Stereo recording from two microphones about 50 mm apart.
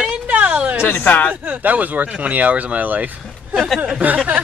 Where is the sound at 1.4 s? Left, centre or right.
Right.